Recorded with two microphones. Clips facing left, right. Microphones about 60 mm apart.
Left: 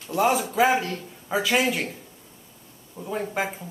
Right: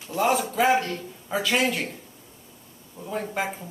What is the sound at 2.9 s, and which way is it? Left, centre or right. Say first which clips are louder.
Speech: left 1 dB; centre.